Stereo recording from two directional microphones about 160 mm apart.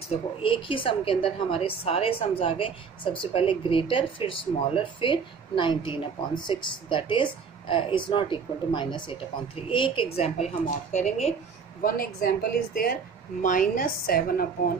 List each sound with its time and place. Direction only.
0.1 s speech: 35° left (ahead or behind)
11.8 s a woman's voice: 65° left (ahead or behind)
13.4 s a woman's voice: 55° left (ahead or behind)